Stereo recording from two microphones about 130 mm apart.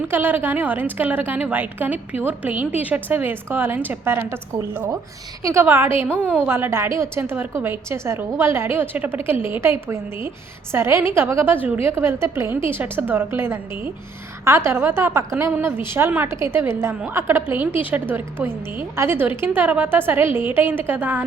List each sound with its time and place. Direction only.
0.0 s a woman's voice: 15° right (ahead or behind)